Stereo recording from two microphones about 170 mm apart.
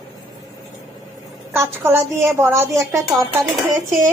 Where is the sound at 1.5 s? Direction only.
15° right (ahead or behind).